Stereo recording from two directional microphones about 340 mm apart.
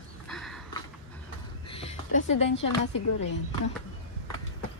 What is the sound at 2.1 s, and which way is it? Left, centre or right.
Speech, left.